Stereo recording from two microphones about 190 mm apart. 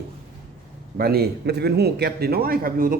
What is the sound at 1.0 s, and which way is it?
A man's voice, 55° right (ahead or behind).